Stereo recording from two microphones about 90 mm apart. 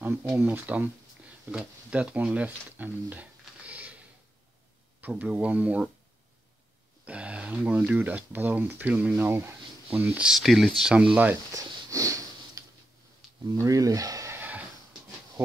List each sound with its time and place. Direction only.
0.0 s speech: 25° right (ahead or behind)
5.0 s speech: 15° right (ahead or behind)
7.1 s speech: 15° right (ahead or behind)
10.3 s speech: centre (ahead or behind)
11.5 s sniff: 40° right (ahead or behind)
13.5 s speech: 40° right (ahead or behind)
14.3 s a sound: 20° right (ahead or behind)